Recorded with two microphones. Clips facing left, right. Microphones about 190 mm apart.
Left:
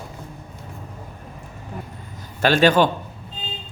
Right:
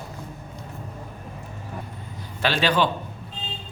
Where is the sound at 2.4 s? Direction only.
45° left (ahead or behind).